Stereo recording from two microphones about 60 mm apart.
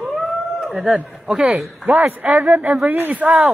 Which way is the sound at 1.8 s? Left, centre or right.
Right.